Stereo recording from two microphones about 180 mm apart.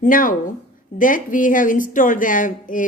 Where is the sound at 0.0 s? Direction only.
50° left (ahead or behind).